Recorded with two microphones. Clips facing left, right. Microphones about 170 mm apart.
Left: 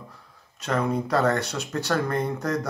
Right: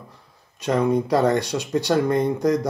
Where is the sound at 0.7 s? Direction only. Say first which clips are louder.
Right 5 dB; 15° right (ahead or behind).